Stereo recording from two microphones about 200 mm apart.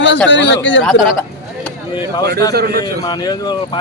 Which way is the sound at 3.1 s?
20° left (ahead or behind).